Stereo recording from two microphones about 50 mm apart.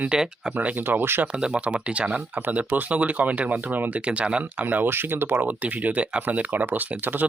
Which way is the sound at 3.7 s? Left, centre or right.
Right.